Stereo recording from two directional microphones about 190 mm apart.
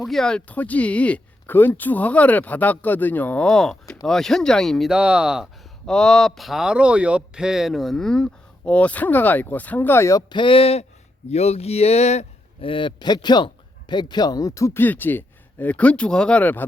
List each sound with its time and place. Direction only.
0.0 s speech: centre (ahead or behind)